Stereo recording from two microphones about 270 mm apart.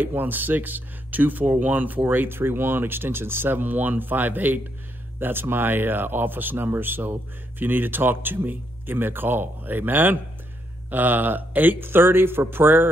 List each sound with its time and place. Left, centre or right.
0.0 s speech: centre